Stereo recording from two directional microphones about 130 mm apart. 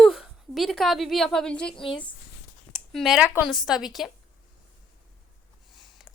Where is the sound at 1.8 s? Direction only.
40° left (ahead or behind).